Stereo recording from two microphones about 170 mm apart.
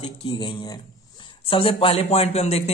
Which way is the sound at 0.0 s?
25° left (ahead or behind).